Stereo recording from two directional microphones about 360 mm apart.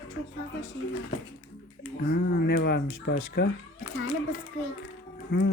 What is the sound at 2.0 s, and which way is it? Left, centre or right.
Speech, left.